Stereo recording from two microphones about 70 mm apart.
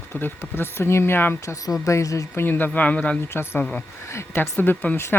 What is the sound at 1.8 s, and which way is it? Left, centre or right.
Speech, left.